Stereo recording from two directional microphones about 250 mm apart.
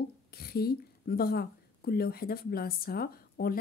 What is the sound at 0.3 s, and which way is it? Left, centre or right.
Speech, left.